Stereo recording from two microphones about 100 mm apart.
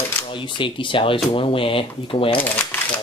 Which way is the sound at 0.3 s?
55° left (ahead or behind).